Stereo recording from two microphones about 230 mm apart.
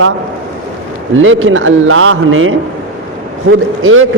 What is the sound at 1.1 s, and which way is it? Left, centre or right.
Speech, right.